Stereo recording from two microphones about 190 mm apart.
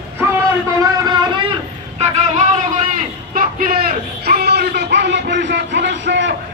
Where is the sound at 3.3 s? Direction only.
50° right (ahead or behind).